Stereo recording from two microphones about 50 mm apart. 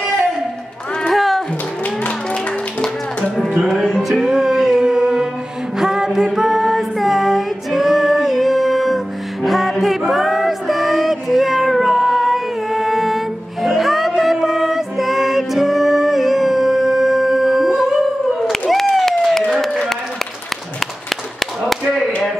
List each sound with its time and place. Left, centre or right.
1.1 s music: centre
2.0 s music: left
3.7 s music: centre
5.8 s female singing: centre
18.5 s a sound: centre
21.1 s a sound: centre